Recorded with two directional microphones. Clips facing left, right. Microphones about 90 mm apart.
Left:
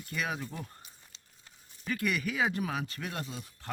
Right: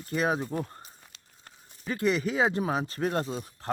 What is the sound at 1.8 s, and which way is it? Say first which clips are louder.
Speech: right 5 dB; 30° right (ahead or behind).